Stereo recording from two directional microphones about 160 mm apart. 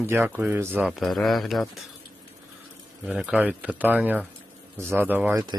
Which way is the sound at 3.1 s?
10° right (ahead or behind).